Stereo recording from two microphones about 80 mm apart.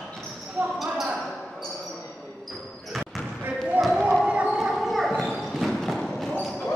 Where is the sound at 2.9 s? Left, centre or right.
Centre.